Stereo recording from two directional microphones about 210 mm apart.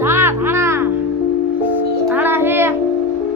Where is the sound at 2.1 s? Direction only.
10° right (ahead or behind).